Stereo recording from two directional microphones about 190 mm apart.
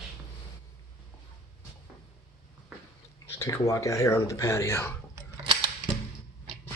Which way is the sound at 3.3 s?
15° left (ahead or behind).